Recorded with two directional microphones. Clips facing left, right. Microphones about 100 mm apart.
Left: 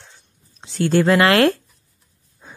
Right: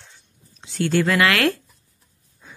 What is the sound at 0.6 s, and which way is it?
Speech, 35° left (ahead or behind).